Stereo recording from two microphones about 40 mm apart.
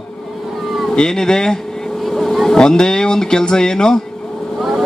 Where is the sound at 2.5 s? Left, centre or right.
Centre.